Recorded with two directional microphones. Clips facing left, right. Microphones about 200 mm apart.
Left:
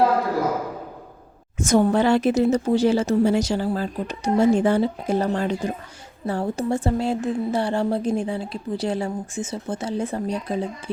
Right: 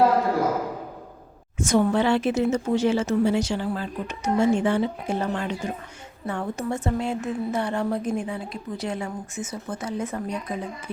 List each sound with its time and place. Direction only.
1.5 s a woman's voice: 45° left (ahead or behind)